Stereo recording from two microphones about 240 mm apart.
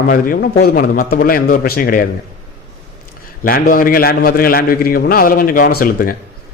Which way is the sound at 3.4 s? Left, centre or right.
Left.